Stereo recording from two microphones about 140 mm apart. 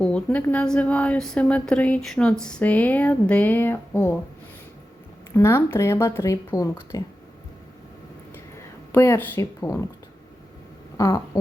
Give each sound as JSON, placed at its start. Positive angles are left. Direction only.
{"t": 0.0, "sound": "a woman's voice", "side_deg": 10}
{"t": 5.3, "sound": "speech", "side_deg": 20}
{"t": 8.5, "sound": "speech", "side_deg": 20}
{"t": 10.9, "sound": "a sound", "side_deg": 20}